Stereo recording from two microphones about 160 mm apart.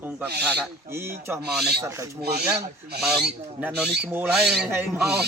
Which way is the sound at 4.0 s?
5° right (ahead or behind).